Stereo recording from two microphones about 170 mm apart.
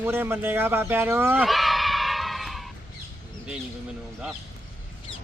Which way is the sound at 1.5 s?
Centre (ahead or behind).